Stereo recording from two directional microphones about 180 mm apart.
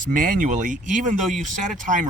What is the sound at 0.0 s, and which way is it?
Speech, 50° right (ahead or behind).